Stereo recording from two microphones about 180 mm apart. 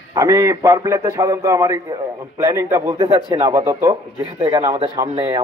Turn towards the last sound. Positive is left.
turn(degrees=-25)  # may be behind; listen again after turning